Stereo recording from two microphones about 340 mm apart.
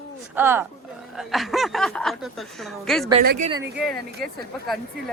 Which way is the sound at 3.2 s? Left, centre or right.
Right.